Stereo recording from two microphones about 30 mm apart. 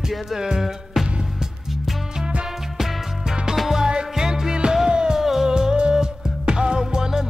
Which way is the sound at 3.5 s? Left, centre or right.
Centre.